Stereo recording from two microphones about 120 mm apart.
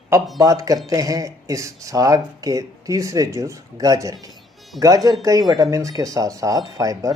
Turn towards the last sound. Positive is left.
turn(degrees=-30)  # may be behind; listen again after turning